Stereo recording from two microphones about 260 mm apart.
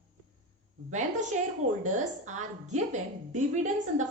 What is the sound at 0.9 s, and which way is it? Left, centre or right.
A woman's voice, right.